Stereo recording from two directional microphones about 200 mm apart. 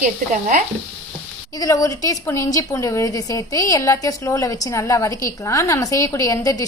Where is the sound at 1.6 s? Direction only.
15° left (ahead or behind).